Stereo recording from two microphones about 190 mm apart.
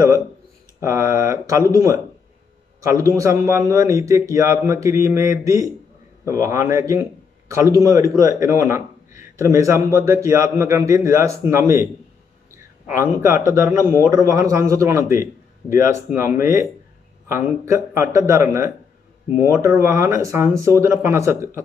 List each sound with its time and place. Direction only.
0.7 s a man's voice: 15° right (ahead or behind)
12.8 s a man's voice: 15° right (ahead or behind)